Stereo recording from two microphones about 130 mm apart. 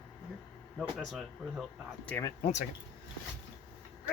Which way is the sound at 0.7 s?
Centre (ahead or behind).